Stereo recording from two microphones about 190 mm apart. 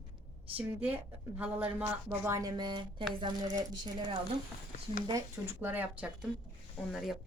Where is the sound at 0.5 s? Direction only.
10° right (ahead or behind).